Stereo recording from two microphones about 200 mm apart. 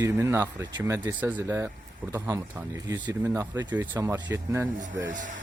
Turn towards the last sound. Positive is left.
turn(degrees=-40)  # may be behind; listen again after turning